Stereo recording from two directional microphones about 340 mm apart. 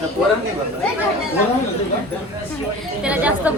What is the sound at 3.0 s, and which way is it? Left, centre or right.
Speech, centre.